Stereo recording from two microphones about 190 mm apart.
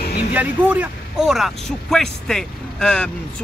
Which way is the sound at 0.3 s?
10° right (ahead or behind).